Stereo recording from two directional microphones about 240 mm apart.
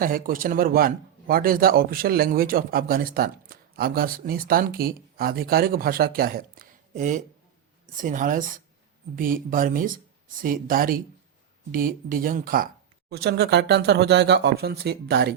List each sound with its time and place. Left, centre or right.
0.0 s a man's voice: right